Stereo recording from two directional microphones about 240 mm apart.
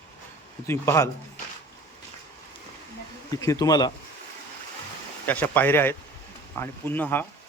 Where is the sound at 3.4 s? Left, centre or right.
Centre.